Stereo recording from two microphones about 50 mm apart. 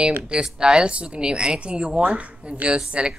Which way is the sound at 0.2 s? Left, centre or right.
Centre.